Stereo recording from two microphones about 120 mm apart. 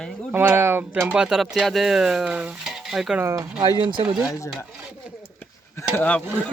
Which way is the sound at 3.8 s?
45° right (ahead or behind).